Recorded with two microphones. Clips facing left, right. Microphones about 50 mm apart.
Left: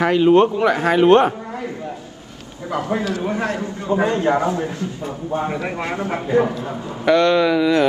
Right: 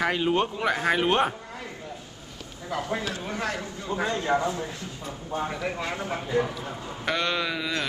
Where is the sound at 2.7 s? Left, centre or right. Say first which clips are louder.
Left 8 dB; left.